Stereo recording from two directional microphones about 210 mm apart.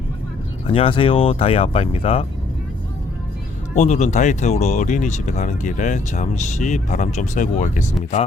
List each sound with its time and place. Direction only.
0.7 s speech: 25° left (ahead or behind)
3.8 s speech: 35° left (ahead or behind)